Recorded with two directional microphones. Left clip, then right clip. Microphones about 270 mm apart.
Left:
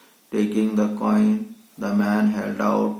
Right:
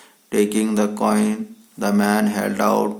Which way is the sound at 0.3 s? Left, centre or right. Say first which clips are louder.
Right 4 dB; right.